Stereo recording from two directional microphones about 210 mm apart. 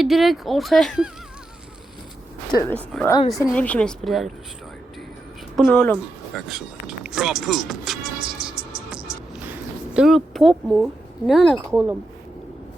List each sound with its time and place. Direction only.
0.0 s speech: centre (ahead or behind)
2.5 s speech: 15° left (ahead or behind)
2.7 s speech: 5° left (ahead or behind)
5.5 s speech: 5° left (ahead or behind)
9.9 s a sound: centre (ahead or behind)
10.5 s speech: centre (ahead or behind)
11.7 s speech: 10° right (ahead or behind)